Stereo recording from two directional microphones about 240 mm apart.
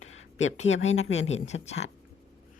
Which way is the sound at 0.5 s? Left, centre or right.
Left.